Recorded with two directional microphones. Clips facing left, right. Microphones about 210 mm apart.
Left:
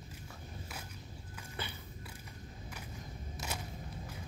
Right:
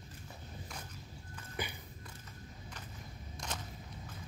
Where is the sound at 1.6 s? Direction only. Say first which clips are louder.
Right 3 dB; 15° right (ahead or behind).